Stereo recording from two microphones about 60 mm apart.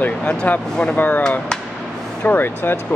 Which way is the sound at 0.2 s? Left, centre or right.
Centre.